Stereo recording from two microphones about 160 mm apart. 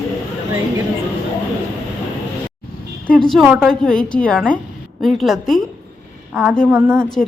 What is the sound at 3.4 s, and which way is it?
Speech, 5° right (ahead or behind).